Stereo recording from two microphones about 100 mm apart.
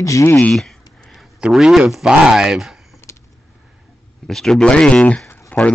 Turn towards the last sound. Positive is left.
turn(degrees=20)  # may be behind; listen again after turning